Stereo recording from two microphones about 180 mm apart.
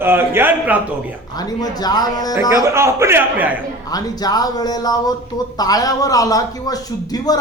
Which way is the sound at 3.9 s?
20° left (ahead or behind).